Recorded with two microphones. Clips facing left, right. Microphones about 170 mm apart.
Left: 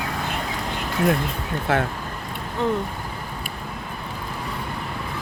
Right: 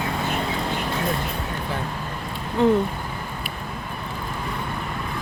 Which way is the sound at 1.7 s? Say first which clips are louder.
Left 10 dB; 80° left.